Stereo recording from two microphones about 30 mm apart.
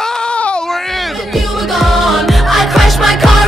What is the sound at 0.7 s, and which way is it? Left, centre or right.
Music, centre.